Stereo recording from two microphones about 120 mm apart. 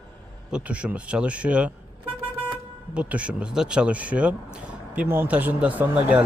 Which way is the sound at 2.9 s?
10° right (ahead or behind).